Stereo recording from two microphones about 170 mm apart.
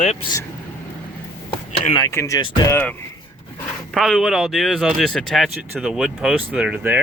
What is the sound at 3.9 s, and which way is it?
Speech, centre (ahead or behind).